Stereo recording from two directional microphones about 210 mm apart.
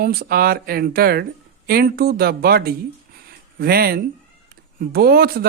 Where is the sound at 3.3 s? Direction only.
50° right (ahead or behind).